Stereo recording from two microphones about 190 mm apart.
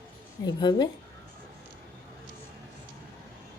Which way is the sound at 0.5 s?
20° left (ahead or behind).